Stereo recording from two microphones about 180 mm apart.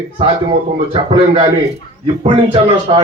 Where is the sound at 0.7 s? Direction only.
40° right (ahead or behind).